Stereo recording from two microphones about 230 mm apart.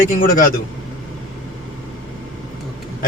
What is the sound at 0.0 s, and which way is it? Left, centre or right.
Speech, left.